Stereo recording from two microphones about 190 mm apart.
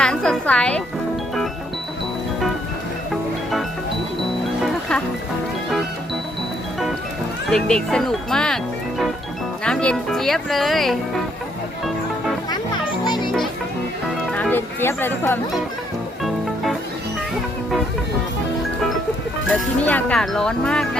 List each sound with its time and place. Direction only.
0.0 s music: 5° left (ahead or behind)
4.6 s music: 5° left (ahead or behind)
7.5 s speech: 5° left (ahead or behind)
13.1 s music: 20° left (ahead or behind)
14.3 s speech: 5° left (ahead or behind)
19.8 s speech: 10° left (ahead or behind)